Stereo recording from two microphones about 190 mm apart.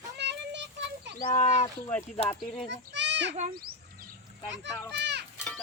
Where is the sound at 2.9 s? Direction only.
70° right (ahead or behind).